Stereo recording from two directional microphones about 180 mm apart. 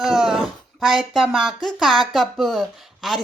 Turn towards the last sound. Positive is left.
turn(degrees=0)  # may be behind; listen again after turning